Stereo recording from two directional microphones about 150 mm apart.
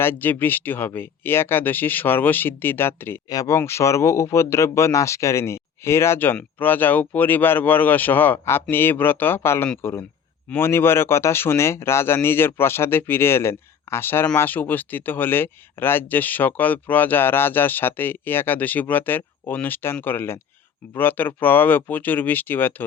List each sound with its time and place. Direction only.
0.0 s speech: 15° left (ahead or behind)